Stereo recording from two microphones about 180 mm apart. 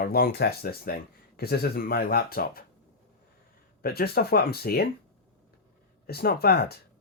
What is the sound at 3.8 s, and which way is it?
Speech, 60° left (ahead or behind).